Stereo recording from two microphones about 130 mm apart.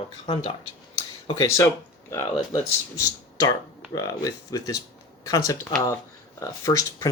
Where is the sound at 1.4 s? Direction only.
25° left (ahead or behind).